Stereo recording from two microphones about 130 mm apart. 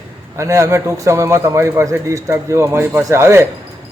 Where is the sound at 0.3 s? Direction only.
20° right (ahead or behind).